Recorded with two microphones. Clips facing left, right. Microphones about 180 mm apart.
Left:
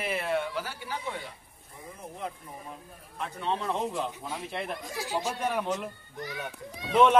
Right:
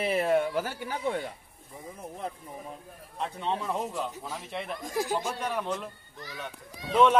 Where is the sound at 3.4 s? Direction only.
15° right (ahead or behind).